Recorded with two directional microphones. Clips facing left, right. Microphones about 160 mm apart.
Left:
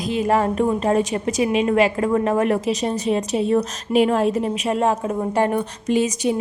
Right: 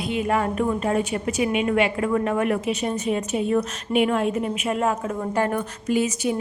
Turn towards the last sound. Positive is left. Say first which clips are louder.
# left 3 dB
turn(degrees=25)  # may be behind; listen again after turning